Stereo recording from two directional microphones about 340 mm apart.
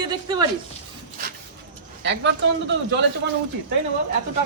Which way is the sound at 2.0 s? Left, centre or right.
Right.